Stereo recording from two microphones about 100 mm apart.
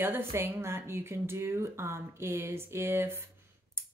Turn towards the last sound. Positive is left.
turn(degrees=-25)  # may be behind; listen again after turning